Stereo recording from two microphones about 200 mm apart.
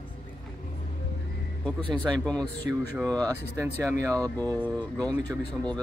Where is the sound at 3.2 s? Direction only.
20° right (ahead or behind).